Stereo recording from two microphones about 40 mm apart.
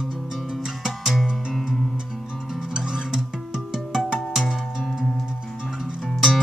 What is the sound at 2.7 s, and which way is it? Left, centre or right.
Music, centre.